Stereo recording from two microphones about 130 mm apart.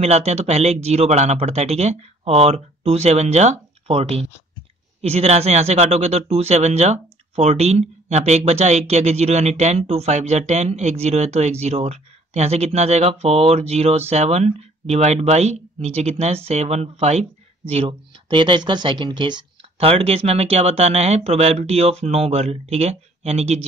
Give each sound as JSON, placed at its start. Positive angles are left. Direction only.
{"t": 0.0, "sound": "speech", "side_deg": -55}
{"t": 19.9, "sound": "speech", "side_deg": -50}